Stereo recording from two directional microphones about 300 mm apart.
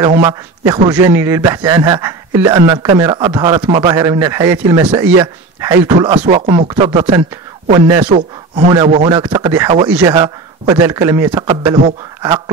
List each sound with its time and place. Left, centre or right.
0.2 s a man's voice: centre